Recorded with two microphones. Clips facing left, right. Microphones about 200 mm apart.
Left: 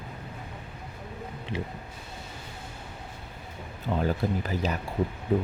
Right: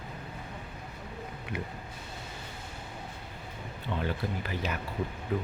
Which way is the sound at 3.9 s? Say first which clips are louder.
Left 6 dB; 40° left (ahead or behind).